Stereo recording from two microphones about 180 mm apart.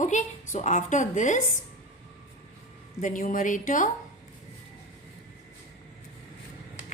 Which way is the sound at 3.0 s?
45° left (ahead or behind).